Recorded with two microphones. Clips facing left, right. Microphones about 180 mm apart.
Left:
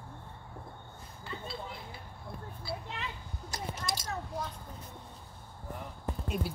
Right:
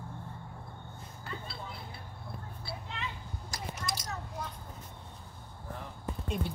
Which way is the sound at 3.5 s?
25° left (ahead or behind).